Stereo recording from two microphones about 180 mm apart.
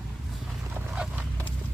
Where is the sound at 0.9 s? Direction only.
5° right (ahead or behind).